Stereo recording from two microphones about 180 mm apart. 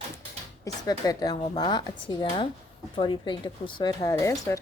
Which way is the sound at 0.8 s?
20° left (ahead or behind).